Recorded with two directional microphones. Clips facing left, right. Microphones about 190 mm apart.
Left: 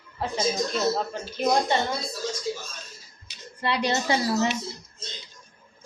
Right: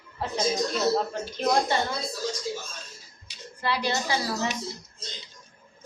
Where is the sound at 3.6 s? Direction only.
25° left (ahead or behind).